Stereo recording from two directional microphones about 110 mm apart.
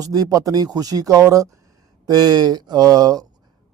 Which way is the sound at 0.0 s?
35° right (ahead or behind).